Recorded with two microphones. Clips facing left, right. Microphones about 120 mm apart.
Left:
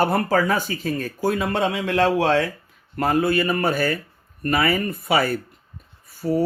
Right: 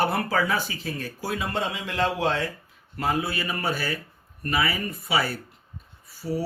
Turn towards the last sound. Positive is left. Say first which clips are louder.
# left 7 dB
turn(degrees=50)  # may be behind; listen again after turning